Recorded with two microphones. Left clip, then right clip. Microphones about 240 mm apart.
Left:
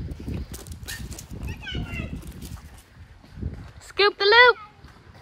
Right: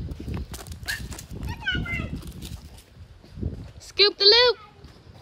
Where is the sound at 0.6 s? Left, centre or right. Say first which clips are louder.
Right 6 dB; left.